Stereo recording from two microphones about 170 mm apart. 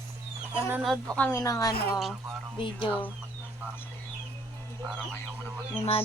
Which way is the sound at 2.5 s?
30° left (ahead or behind).